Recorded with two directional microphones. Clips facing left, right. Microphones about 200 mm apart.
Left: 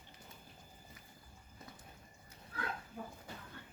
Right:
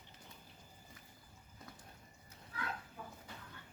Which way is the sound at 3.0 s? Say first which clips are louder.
Left 5 dB; 50° left (ahead or behind).